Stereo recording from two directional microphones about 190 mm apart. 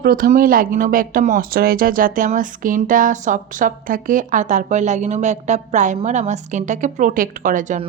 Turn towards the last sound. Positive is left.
turn(degrees=-45)  # may be behind; listen again after turning